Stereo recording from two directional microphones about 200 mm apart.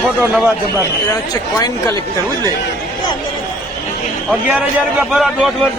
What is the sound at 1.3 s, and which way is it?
Speech, 20° left (ahead or behind).